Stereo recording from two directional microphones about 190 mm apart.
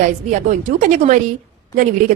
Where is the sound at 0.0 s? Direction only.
40° right (ahead or behind).